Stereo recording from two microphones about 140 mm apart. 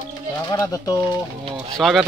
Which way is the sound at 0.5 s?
20° left (ahead or behind).